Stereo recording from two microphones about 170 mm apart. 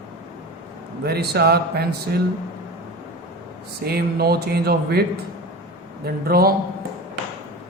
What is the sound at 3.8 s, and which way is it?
Speech, 65° right (ahead or behind).